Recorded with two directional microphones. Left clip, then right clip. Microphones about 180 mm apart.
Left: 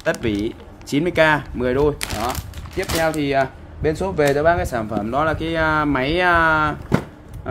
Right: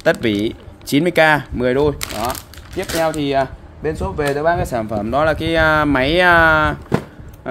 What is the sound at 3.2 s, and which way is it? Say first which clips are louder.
Speech: right 1 dB; 20° right (ahead or behind).